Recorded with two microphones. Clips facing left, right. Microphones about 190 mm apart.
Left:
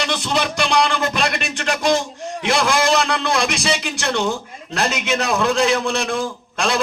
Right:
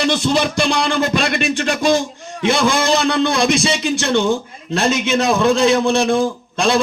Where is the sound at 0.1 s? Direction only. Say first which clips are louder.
Right 5 dB; 30° right (ahead or behind).